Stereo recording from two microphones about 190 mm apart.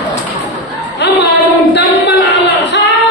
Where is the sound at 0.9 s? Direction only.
65° left (ahead or behind).